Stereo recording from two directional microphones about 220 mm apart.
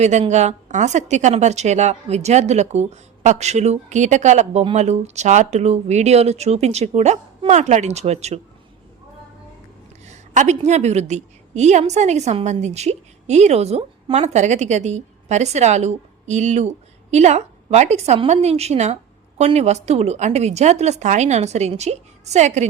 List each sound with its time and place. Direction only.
0.0 s a woman's voice: 30° right (ahead or behind)
10.1 s a woman's voice: 30° right (ahead or behind)